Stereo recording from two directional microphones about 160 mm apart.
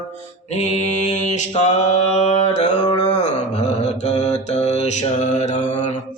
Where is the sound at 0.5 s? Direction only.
45° left (ahead or behind).